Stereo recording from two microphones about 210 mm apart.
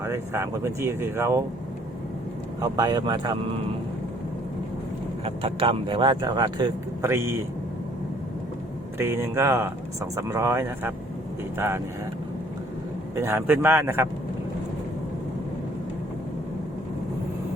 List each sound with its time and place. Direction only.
0.0 s speech: 15° right (ahead or behind)
2.6 s speech: 20° right (ahead or behind)
5.2 s speech: 25° right (ahead or behind)
9.0 s speech: 10° right (ahead or behind)
13.1 s speech: 10° right (ahead or behind)